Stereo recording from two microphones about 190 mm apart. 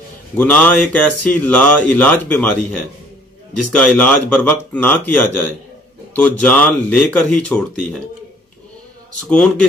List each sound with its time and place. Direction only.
0.3 s speech: 10° left (ahead or behind)
9.3 s a man's voice: 5° left (ahead or behind)